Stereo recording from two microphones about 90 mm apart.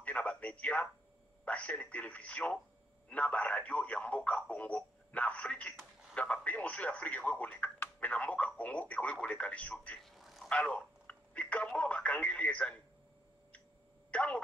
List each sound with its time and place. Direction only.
0.0 s radio: 15° left (ahead or behind)
1.4 s speech: 15° left (ahead or behind)
10.0 s vehicle: centre (ahead or behind)
10.5 s telephone: 15° left (ahead or behind)
14.1 s speech: 15° left (ahead or behind)